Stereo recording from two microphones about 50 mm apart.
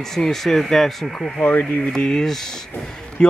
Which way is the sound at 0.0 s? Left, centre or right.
Centre.